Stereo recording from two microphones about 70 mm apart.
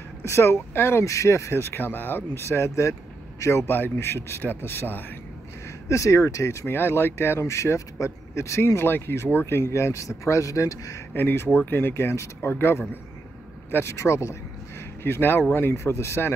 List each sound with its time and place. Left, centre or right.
0.2 s speech: left
5.9 s speech: left
11.1 s speech: left